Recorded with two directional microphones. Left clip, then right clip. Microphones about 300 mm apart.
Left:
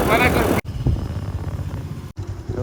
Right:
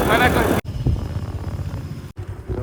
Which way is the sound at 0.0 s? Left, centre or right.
Centre.